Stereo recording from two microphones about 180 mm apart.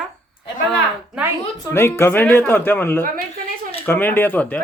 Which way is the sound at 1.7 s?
15° left (ahead or behind).